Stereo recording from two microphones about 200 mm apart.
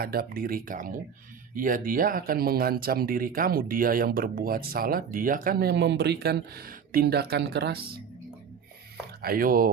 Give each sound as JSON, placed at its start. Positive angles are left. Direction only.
{"t": 0.0, "sound": "speech", "side_deg": -50}
{"t": 9.2, "sound": "speech", "side_deg": -45}